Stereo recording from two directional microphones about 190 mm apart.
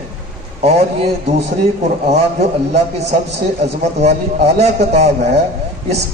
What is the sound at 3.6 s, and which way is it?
A man's voice, 35° right (ahead or behind).